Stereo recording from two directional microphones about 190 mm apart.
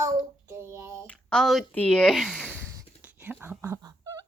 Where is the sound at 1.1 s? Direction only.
5° left (ahead or behind).